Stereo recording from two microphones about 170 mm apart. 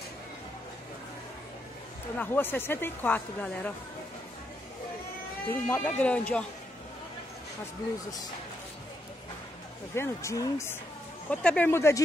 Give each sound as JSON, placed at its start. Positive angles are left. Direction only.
{"t": 2.1, "sound": "a woman's voice", "side_deg": 10}
{"t": 5.5, "sound": "a woman's voice", "side_deg": 10}
{"t": 9.9, "sound": "a woman's voice", "side_deg": 15}